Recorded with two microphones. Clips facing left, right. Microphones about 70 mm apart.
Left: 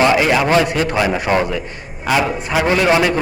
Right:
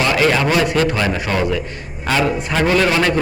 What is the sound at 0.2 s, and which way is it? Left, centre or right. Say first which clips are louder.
A man's voice: left 1 dB; centre.